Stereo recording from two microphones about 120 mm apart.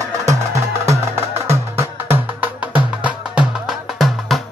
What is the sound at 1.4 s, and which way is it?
Music, 20° right (ahead or behind).